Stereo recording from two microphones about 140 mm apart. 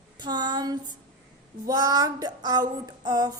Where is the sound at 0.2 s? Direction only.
30° right (ahead or behind).